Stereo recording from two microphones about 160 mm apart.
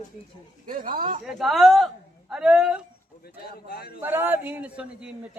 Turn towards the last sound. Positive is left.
turn(degrees=-10)  # may be behind; listen again after turning